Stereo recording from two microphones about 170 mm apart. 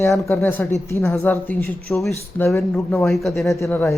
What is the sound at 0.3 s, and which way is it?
Speech, 10° left (ahead or behind).